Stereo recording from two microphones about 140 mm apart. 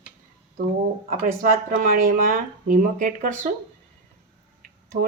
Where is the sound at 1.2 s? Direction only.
75° right (ahead or behind).